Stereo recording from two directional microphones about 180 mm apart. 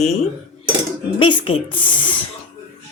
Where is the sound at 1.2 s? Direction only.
30° left (ahead or behind).